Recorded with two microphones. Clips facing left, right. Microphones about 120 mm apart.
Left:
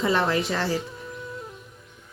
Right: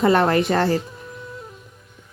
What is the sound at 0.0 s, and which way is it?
Speech, 55° right (ahead or behind).